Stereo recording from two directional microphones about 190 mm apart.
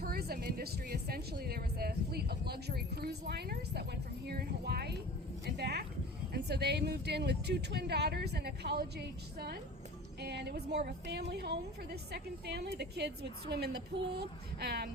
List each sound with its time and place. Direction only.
0.0 s a woman's voice: 55° right (ahead or behind)